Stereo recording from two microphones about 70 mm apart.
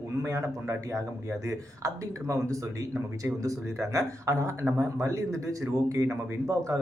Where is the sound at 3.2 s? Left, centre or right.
Right.